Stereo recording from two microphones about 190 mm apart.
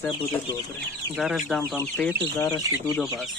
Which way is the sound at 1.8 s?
10° left (ahead or behind).